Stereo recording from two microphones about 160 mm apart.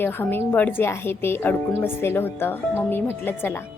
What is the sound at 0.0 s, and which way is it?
Speech, 15° left (ahead or behind).